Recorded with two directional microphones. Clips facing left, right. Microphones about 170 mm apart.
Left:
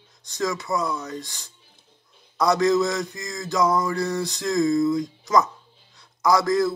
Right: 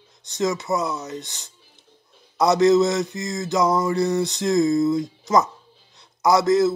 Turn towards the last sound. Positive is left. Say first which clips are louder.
# right 3 dB
turn(degrees=-25)  # may be behind; listen again after turning